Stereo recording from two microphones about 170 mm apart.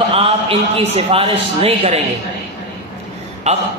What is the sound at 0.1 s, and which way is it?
A man's voice, 35° right (ahead or behind).